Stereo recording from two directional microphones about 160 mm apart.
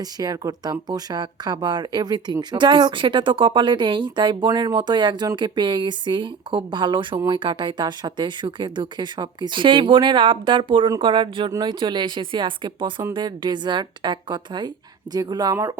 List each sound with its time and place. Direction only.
0.0 s speech: 25° right (ahead or behind)